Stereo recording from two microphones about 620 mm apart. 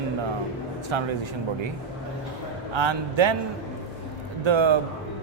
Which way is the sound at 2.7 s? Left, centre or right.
Right.